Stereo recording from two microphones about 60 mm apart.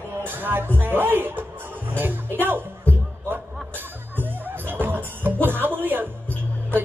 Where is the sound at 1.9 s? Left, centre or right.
Right.